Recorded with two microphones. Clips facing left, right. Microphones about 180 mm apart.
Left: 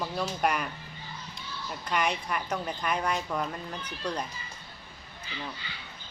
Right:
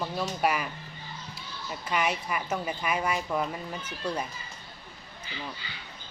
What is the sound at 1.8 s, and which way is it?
A woman's voice, 5° right (ahead or behind).